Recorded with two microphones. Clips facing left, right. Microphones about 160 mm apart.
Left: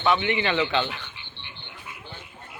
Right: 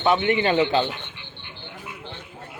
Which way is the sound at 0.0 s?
45° right (ahead or behind).